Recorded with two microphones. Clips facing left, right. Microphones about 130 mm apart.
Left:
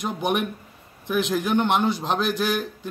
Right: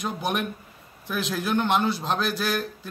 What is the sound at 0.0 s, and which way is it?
A man's voice, 15° left (ahead or behind).